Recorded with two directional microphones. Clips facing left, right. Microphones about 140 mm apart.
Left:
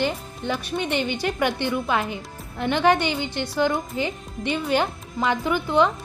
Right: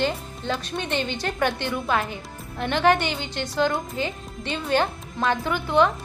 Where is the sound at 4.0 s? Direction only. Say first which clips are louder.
Left 2 dB; 15° left (ahead or behind).